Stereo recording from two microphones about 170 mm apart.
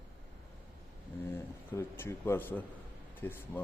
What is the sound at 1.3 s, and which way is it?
Speech, 15° left (ahead or behind).